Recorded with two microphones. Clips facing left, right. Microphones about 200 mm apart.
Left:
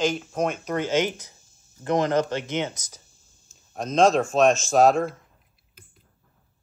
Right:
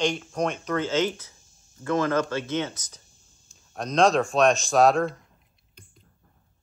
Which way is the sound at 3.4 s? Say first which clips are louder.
Left 2 dB; centre (ahead or behind).